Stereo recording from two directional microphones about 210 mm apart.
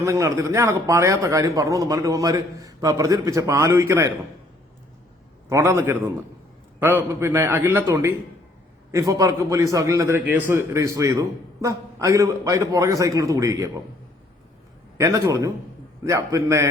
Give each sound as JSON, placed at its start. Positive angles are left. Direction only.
{"t": 0.0, "sound": "a man's voice", "side_deg": -15}
{"t": 5.5, "sound": "a man's voice", "side_deg": -15}
{"t": 14.9, "sound": "a man's voice", "side_deg": -15}